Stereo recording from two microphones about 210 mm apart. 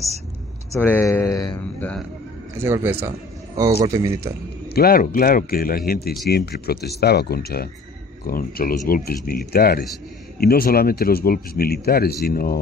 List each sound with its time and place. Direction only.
0.7 s speech: 10° left (ahead or behind)
1.8 s speech: 5° left (ahead or behind)
2.5 s speech: 10° right (ahead or behind)
4.7 s speech: 45° left (ahead or behind)